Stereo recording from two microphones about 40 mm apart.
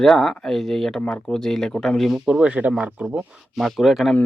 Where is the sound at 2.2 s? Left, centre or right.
Right.